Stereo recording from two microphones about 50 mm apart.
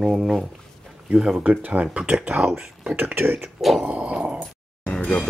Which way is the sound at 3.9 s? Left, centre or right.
Right.